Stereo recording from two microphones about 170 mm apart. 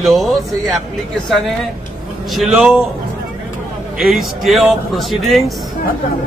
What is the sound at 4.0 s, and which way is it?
A man's voice, centre (ahead or behind).